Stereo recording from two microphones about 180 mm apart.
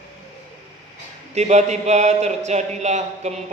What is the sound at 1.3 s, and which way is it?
Speech, 40° right (ahead or behind).